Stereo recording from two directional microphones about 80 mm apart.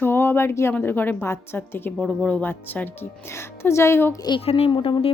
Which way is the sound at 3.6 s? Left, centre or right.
Left.